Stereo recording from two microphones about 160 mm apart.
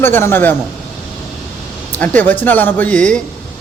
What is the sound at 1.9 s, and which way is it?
Speech, 10° left (ahead or behind).